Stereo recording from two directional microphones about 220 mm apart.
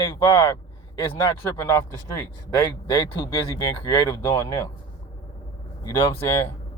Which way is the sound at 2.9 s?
20° left (ahead or behind).